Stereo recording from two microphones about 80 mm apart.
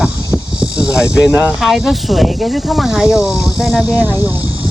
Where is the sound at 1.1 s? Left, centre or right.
Centre.